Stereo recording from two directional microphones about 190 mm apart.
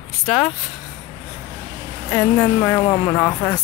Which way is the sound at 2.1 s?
5° left (ahead or behind).